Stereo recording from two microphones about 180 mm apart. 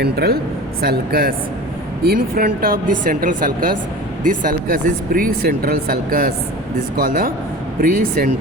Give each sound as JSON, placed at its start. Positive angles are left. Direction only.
{"t": 0.0, "sound": "speech", "side_deg": -60}